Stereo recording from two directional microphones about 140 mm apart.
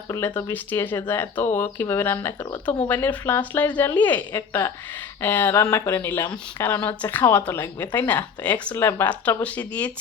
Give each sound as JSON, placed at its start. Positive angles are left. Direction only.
{"t": 0.3, "sound": "a woman's voice", "side_deg": 15}